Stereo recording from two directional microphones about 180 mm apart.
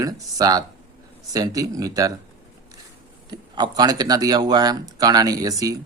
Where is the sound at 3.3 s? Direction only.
25° right (ahead or behind).